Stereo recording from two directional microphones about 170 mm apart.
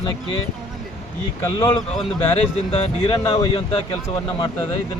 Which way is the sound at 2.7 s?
30° left (ahead or behind).